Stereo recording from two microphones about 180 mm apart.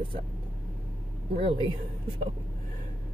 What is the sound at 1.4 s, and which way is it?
Speech, 30° right (ahead or behind).